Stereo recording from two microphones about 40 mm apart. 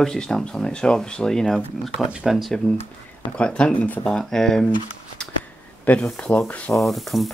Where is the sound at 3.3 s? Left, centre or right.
Left.